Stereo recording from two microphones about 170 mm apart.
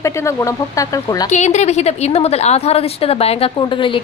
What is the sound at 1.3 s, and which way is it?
A woman's voice, 45° left (ahead or behind).